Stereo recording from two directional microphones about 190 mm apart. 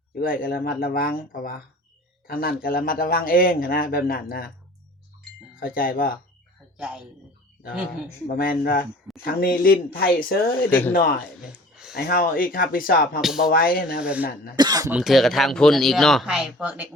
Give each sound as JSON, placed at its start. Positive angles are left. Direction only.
{"t": 0.2, "sound": "a man's voice", "side_deg": 50}
{"t": 5.5, "sound": "a man's voice", "side_deg": 50}
{"t": 6.7, "sound": "speech", "side_deg": -5}
{"t": 8.4, "sound": "a man's voice", "side_deg": 50}
{"t": 10.7, "sound": "speech", "side_deg": 10}
{"t": 11.9, "sound": "a man's voice", "side_deg": 50}
{"t": 14.0, "sound": "speech", "side_deg": -5}
{"t": 14.5, "sound": "speech", "side_deg": -20}
{"t": 14.9, "sound": "speech", "side_deg": 0}